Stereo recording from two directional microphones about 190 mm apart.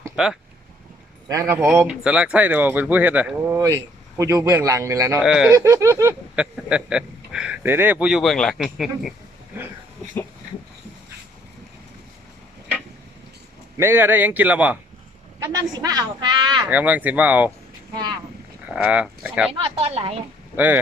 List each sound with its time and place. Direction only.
0.2 s speech: 5° right (ahead or behind)
1.3 s speech: 20° right (ahead or behind)
1.5 s speech: 5° right (ahead or behind)
5.2 s speech: 5° right (ahead or behind)
5.5 s speech: 15° right (ahead or behind)
6.3 s speech: 5° right (ahead or behind)
13.7 s speech: 15° right (ahead or behind)
15.4 s a man's voice: 20° right (ahead or behind)
16.6 s speech: 10° right (ahead or behind)
18.7 s speech: 5° right (ahead or behind)
19.5 s speech: 30° right (ahead or behind)